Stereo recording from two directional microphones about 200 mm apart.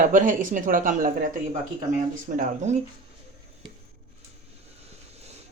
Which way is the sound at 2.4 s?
35° right (ahead or behind).